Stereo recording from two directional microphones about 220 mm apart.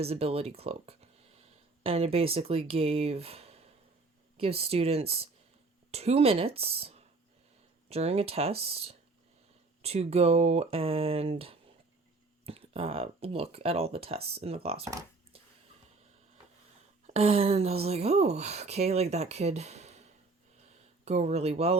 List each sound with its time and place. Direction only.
0.0 s speech: 25° right (ahead or behind)
17.1 s speech: 25° right (ahead or behind)
20.7 s a sound: 30° right (ahead or behind)